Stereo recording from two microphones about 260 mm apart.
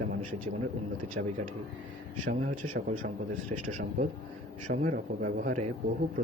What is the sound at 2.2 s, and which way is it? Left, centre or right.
Speech, right.